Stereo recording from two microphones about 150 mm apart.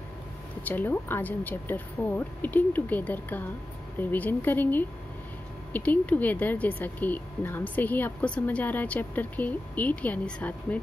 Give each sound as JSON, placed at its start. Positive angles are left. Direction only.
{"t": 0.7, "sound": "speech", "side_deg": 10}